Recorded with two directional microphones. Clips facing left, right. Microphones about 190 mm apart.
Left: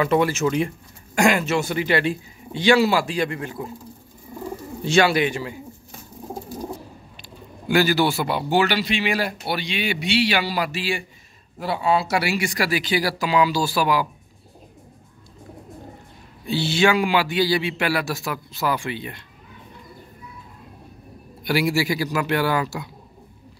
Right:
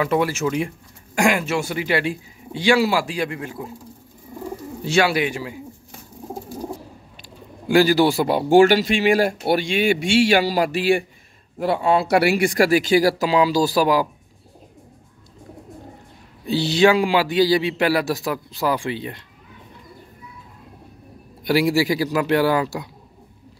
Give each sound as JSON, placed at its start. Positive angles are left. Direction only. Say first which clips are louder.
{"t": 0.0, "sound": "speech", "louder": "left 1 dB", "side_deg": -10}
{"t": 4.8, "sound": "speech", "louder": "left 1 dB", "side_deg": -10}
{"t": 7.2, "sound": "speech", "louder": "right 2 dB", "side_deg": -30}
{"t": 16.4, "sound": "speech", "louder": "right 4 dB", "side_deg": -35}
{"t": 21.5, "sound": "speech", "louder": "right 3 dB", "side_deg": -35}